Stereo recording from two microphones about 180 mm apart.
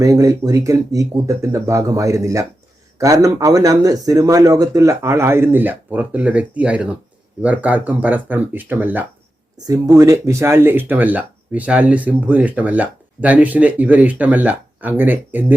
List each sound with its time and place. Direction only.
0.0 s speech: 20° right (ahead or behind)